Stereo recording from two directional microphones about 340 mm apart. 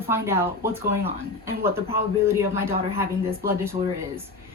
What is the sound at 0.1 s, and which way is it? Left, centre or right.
Speech, centre.